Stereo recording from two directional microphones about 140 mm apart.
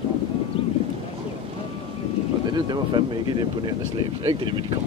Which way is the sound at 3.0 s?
35° right (ahead or behind).